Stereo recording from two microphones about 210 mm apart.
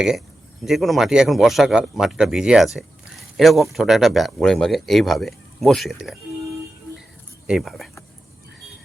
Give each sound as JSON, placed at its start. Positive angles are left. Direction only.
{"t": 0.6, "sound": "speech", "side_deg": 0}
{"t": 7.4, "sound": "speech", "side_deg": 0}